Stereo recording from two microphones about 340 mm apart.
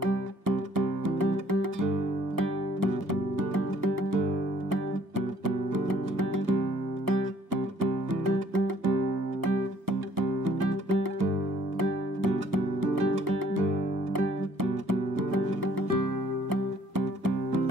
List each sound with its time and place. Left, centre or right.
0.0 s music: right
14.1 s music: right